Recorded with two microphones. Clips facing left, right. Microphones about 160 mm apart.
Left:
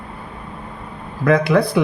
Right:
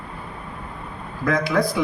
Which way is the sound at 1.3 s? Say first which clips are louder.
Left 6 dB; 60° left (ahead or behind).